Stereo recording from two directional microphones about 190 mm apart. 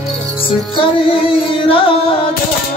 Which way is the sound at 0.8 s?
25° left (ahead or behind).